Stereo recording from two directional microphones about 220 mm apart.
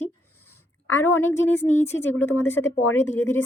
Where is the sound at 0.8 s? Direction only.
65° left (ahead or behind).